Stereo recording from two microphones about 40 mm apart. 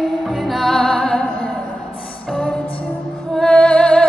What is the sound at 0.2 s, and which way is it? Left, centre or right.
Music, centre.